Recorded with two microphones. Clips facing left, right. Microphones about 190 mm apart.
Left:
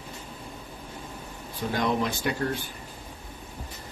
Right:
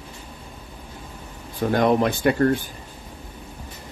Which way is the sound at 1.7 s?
55° right (ahead or behind).